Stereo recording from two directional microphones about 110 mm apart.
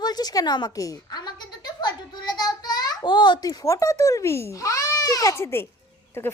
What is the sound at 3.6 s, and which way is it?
A child's voice, 30° left (ahead or behind).